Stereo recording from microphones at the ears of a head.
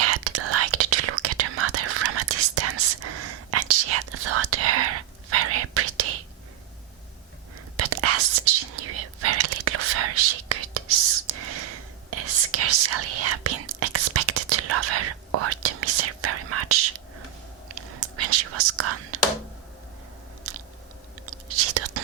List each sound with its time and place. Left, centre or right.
0.0 s whispering: right
7.8 s whispering: right
21.2 s whispering: right